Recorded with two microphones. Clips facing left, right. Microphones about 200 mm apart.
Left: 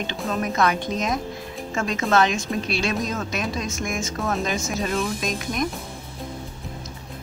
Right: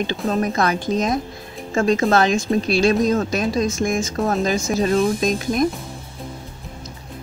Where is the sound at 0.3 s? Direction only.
35° right (ahead or behind).